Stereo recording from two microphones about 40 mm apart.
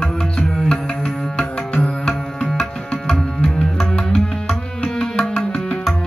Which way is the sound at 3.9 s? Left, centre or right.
Centre.